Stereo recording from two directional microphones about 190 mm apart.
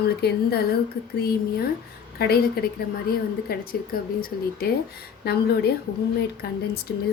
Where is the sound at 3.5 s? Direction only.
55° left (ahead or behind).